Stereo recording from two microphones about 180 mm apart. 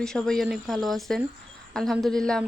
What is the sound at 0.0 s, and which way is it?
Speech, 5° left (ahead or behind).